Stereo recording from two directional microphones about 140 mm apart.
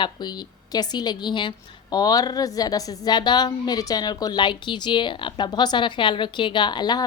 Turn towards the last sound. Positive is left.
turn(degrees=30)  # may be behind; listen again after turning